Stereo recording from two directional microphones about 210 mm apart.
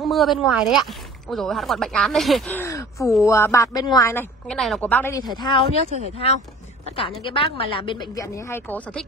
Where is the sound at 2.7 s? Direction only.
15° left (ahead or behind).